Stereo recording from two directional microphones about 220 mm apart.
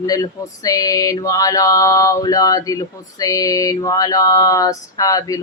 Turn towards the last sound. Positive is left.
turn(degrees=15)  # may be behind; listen again after turning